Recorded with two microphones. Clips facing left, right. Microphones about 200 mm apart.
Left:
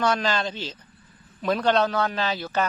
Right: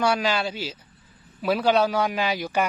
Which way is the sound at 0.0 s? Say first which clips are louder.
Right 1 dB; 10° right (ahead or behind).